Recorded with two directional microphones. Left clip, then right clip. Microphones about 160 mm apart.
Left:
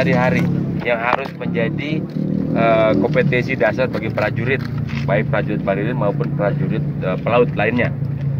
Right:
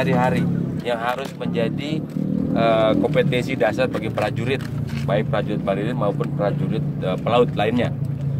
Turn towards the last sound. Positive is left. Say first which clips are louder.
# left 2 dB
turn(degrees=-15)  # may be behind; listen again after turning